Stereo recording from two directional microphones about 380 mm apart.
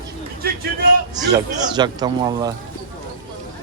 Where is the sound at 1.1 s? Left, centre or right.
Centre.